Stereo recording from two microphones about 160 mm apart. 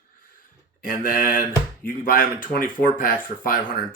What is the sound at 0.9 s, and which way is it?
Speech, 60° left (ahead or behind).